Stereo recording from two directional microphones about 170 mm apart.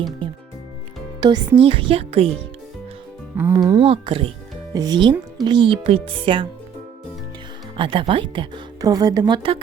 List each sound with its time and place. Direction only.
1.2 s speech: 25° right (ahead or behind)
3.3 s speech: 15° right (ahead or behind)
3.8 s speech: 35° right (ahead or behind)
4.7 s speech: 25° right (ahead or behind)
7.8 s speech: 30° right (ahead or behind)